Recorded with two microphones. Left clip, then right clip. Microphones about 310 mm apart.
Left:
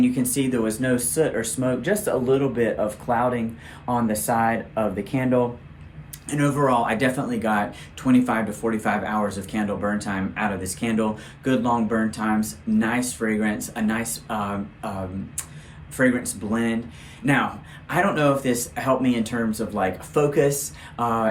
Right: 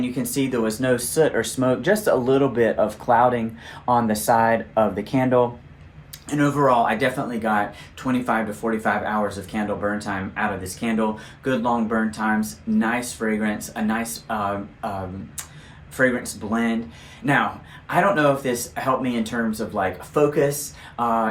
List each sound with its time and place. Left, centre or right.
0.0 s speech: centre
16.0 s speech: centre
17.8 s speech: centre